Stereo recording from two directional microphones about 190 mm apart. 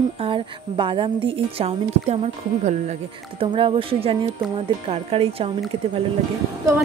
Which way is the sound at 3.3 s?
30° right (ahead or behind).